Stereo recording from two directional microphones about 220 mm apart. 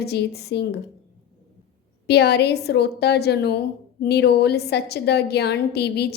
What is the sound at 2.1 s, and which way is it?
A woman's voice, 50° left (ahead or behind).